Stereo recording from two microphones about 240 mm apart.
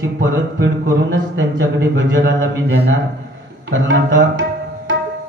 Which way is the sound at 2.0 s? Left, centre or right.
Right.